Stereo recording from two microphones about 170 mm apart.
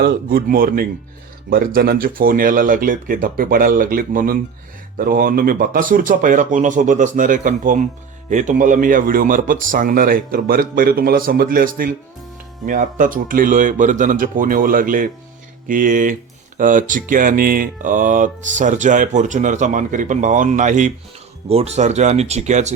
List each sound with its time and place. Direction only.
0.0 s speech: 60° right (ahead or behind); by 22.7 s 40° right (ahead or behind)